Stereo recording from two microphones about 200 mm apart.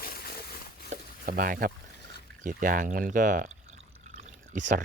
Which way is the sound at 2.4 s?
40° right (ahead or behind).